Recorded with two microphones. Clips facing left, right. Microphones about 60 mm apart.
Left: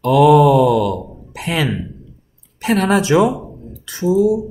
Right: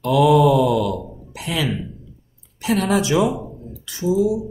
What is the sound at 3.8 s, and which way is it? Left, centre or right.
Speech, left.